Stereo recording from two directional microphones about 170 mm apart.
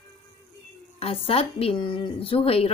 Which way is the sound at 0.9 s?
35° left (ahead or behind).